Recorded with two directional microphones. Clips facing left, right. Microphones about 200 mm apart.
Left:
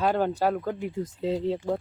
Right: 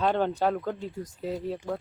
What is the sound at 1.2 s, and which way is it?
Speech, 25° left (ahead or behind).